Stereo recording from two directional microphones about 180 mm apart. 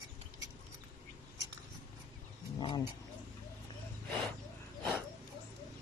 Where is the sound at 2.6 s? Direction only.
25° left (ahead or behind).